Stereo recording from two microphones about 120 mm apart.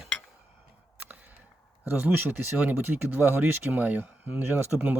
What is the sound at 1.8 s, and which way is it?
Speech, 15° right (ahead or behind).